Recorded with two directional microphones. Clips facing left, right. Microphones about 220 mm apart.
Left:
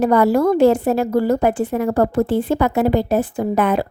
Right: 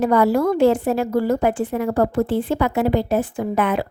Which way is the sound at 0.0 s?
45° left (ahead or behind).